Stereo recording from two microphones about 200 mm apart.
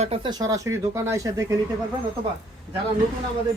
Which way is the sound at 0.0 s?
25° right (ahead or behind).